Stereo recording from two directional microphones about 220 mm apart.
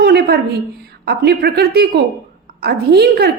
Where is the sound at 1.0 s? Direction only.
45° right (ahead or behind).